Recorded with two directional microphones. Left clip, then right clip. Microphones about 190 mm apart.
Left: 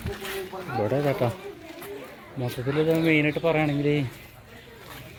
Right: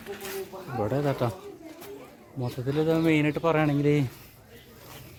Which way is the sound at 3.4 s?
35° right (ahead or behind).